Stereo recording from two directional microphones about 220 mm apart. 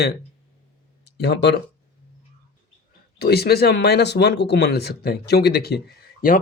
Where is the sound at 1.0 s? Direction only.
50° left (ahead or behind).